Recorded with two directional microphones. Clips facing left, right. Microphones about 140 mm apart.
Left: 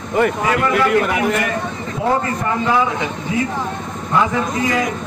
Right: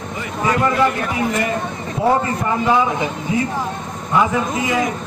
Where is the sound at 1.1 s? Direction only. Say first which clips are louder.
Left 2 dB; 65° left (ahead or behind).